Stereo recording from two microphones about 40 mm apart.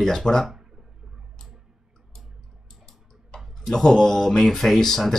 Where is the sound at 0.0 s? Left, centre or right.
Centre.